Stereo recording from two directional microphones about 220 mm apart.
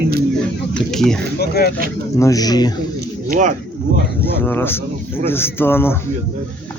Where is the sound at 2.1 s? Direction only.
15° left (ahead or behind).